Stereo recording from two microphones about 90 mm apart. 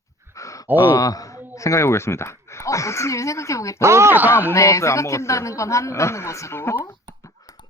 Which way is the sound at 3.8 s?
30° right (ahead or behind).